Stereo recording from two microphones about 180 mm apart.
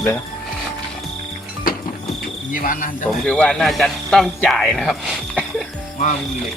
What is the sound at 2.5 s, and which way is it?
Cricket, 50° left (ahead or behind).